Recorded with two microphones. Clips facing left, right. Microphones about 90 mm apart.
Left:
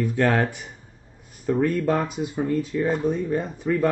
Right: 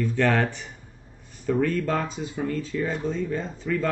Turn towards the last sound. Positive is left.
turn(degrees=15)  # may be behind; listen again after turning